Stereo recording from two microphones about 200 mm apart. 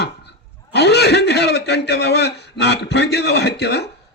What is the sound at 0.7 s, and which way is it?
A man's voice, 55° left (ahead or behind).